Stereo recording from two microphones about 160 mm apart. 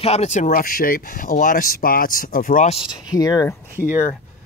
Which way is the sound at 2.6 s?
35° left (ahead or behind).